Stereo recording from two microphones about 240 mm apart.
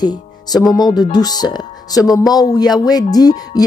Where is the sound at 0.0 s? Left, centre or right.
Centre.